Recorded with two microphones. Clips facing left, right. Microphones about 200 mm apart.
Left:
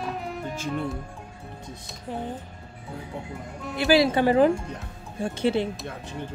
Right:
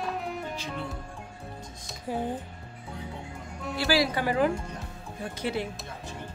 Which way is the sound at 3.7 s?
20° left (ahead or behind).